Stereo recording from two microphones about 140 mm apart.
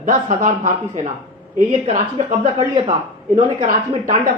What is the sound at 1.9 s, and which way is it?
Speech, 45° right (ahead or behind).